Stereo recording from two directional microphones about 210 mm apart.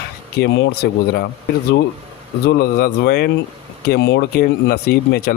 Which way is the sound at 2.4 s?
50° left (ahead or behind).